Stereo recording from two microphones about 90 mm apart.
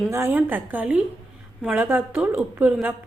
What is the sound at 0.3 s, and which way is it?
A woman's voice, 20° right (ahead or behind).